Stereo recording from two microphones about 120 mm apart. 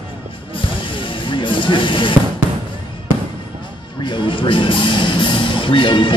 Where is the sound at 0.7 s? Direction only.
45° left (ahead or behind).